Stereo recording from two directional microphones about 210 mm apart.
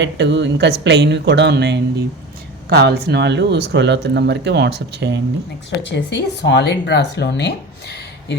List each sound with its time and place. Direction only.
0.0 s speech: 55° right (ahead or behind)
5.9 s speech: 55° left (ahead or behind)